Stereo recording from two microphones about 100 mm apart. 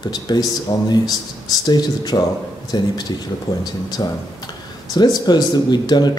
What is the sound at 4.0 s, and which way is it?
Speech, 40° left (ahead or behind).